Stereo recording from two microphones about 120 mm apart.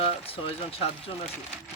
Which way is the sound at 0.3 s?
50° left (ahead or behind).